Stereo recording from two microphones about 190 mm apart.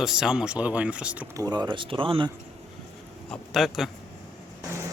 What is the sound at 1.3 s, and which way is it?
Speech, 20° right (ahead or behind).